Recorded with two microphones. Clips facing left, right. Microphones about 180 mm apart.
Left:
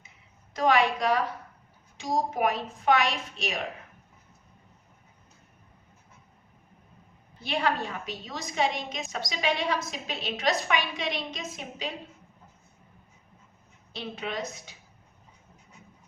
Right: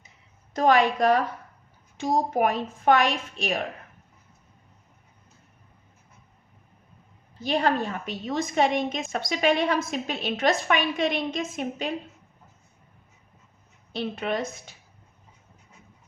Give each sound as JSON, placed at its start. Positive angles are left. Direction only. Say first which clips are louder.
{"t": 0.5, "sound": "a woman's voice", "louder": "right 3 dB", "side_deg": -45}
{"t": 7.3, "sound": "a woman's voice", "louder": "right 4 dB", "side_deg": -40}
{"t": 13.9, "sound": "a woman's voice", "louder": "right 6 dB", "side_deg": -55}